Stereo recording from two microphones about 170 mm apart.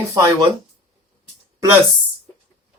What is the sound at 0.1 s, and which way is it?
Speech, 20° right (ahead or behind).